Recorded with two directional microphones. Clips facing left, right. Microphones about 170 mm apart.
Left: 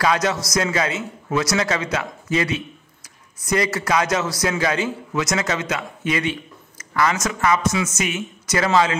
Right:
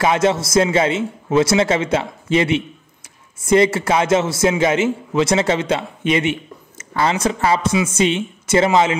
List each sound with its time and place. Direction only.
0.0 s a man's voice: 25° right (ahead or behind)